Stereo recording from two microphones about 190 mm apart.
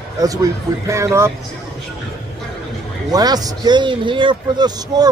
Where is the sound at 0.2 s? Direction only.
20° right (ahead or behind).